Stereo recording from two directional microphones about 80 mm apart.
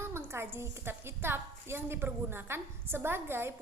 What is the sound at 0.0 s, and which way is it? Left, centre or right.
A woman's voice, right.